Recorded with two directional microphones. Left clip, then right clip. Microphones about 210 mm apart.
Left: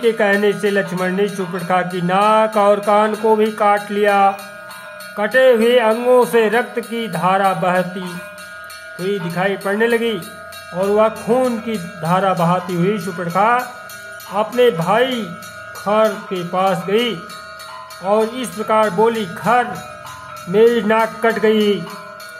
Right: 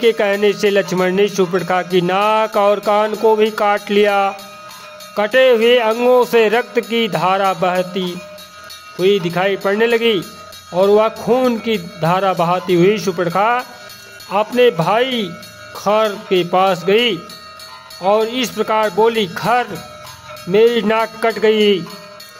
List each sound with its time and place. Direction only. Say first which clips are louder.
0.0 s speech: right 1 dB; 50° right (ahead or behind)